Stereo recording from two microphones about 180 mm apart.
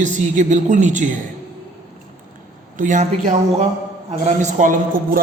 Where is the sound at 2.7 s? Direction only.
45° right (ahead or behind).